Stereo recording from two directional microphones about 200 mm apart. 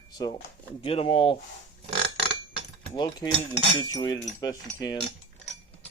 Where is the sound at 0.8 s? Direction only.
25° left (ahead or behind).